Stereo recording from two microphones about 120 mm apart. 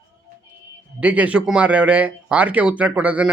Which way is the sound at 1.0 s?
10° right (ahead or behind).